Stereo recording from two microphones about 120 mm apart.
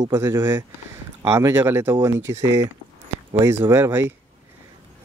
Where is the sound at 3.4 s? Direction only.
20° right (ahead or behind).